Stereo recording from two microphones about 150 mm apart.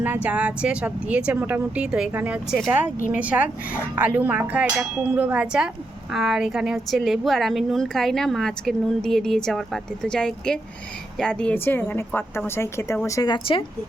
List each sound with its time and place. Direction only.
0.0 s a woman's voice: 10° right (ahead or behind); by 13.7 s 30° left (ahead or behind)